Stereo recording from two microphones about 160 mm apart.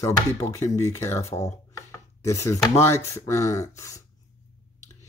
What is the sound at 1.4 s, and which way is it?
Chopping, 20° left (ahead or behind).